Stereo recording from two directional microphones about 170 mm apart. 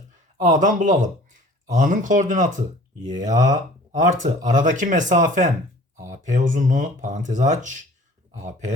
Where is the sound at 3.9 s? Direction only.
45° right (ahead or behind).